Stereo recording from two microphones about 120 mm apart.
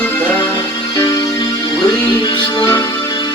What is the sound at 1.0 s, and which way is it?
Music, 35° left (ahead or behind).